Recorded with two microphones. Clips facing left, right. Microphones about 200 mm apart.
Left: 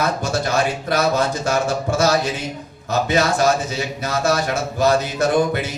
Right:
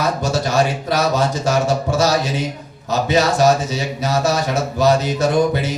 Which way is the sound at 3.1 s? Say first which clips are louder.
Right 3 dB; 55° left (ahead or behind).